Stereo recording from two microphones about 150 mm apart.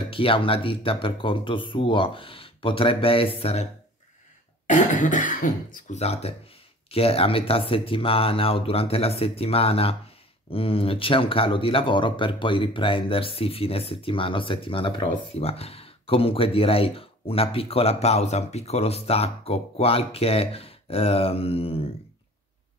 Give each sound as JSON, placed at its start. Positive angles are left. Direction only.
{"t": 0.1, "sound": "speech", "side_deg": 35}
{"t": 4.6, "sound": "speech", "side_deg": 55}